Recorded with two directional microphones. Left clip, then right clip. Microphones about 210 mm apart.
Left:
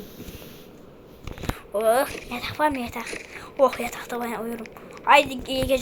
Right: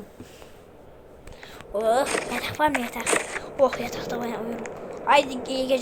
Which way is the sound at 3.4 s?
Centre (ahead or behind).